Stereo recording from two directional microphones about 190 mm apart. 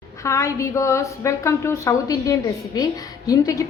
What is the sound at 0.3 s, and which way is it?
A woman's voice, 15° left (ahead or behind).